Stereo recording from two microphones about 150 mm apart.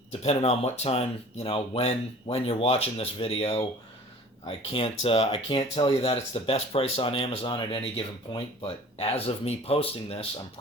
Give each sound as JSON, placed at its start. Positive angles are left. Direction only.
{"t": 0.1, "sound": "speech", "side_deg": 45}